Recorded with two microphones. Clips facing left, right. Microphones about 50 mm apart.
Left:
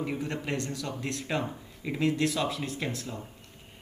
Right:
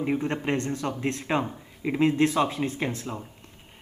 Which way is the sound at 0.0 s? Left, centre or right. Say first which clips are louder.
Right 6 dB; right.